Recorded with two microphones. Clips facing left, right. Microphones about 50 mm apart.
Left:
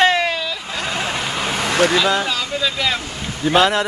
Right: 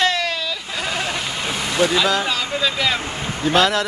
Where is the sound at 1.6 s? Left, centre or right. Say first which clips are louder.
Left 2 dB; left.